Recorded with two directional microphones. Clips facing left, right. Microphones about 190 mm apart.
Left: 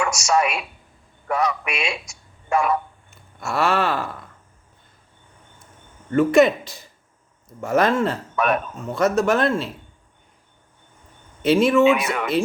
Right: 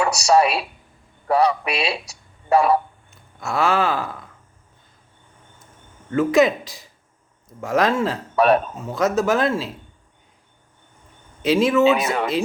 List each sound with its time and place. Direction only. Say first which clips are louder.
0.0 s speech: right 4 dB; 35° right (ahead or behind)
3.3 s gasp: right 1 dB; centre (ahead or behind)
6.1 s gasp: left 1 dB; centre (ahead or behind)
8.4 s speech: right 6 dB; 30° right (ahead or behind)
8.8 s gasp: left 1 dB; centre (ahead or behind)
11.4 s gasp: left 1 dB; centre (ahead or behind)
12.0 s speech: right 3 dB; 30° right (ahead or behind)